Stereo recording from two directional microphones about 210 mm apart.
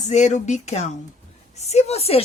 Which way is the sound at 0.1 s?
35° left (ahead or behind).